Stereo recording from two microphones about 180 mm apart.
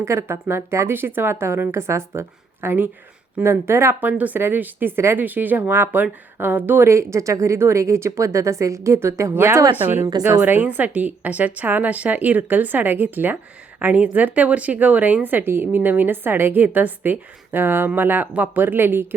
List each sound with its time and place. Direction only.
0.0 s a woman's voice: 15° right (ahead or behind)
10.4 s a woman's voice: 10° right (ahead or behind)